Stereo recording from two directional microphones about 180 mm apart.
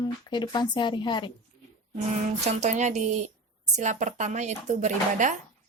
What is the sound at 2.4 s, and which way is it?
Speech, 40° right (ahead or behind).